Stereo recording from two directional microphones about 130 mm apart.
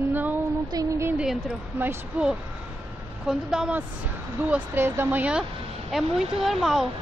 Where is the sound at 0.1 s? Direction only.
15° right (ahead or behind).